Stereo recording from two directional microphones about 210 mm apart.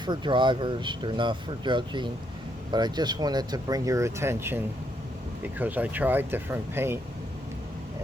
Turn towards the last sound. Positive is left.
turn(degrees=-10)  # may be behind; listen again after turning